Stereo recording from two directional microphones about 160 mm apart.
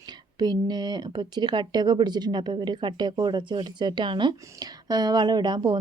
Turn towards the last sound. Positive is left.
turn(degrees=-30)  # may be behind; listen again after turning